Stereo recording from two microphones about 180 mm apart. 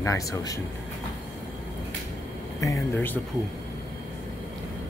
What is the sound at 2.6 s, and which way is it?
Speech, 15° left (ahead or behind).